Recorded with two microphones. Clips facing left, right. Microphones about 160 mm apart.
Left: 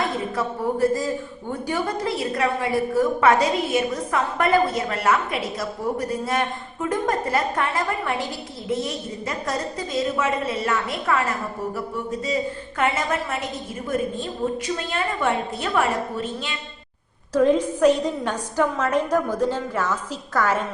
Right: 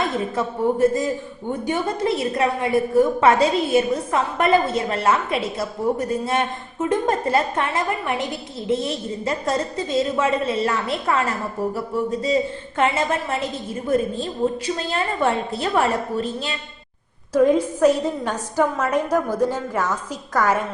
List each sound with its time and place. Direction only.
0.0 s a woman's voice: 20° right (ahead or behind)
12.8 s a woman's voice: 25° right (ahead or behind)
17.3 s a woman's voice: 10° right (ahead or behind)